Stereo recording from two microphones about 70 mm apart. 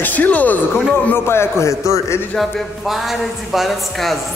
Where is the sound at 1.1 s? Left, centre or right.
Left.